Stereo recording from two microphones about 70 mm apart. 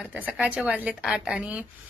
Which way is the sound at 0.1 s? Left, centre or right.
Right.